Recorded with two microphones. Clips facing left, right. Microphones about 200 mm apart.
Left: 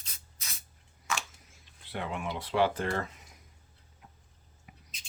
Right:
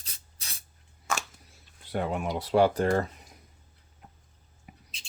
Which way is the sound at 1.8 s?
45° right (ahead or behind).